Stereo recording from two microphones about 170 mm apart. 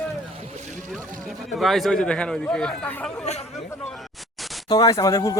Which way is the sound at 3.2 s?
40° left (ahead or behind).